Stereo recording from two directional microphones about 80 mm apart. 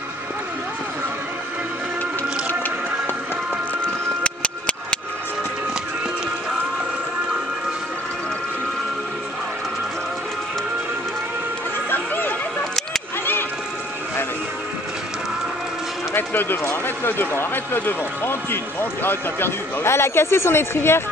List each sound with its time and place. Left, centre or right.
3.8 s music: centre
11.9 s chatter: left
16.2 s run: left
16.8 s speech: left